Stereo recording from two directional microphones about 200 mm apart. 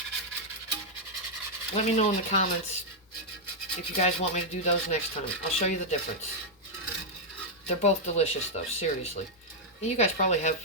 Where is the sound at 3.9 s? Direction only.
35° left (ahead or behind).